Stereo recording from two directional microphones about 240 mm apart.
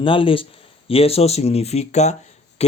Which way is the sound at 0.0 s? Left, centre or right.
Left.